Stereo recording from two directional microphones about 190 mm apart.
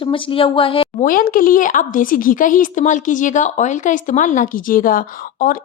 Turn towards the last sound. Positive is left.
turn(degrees=45)  # may be behind; listen again after turning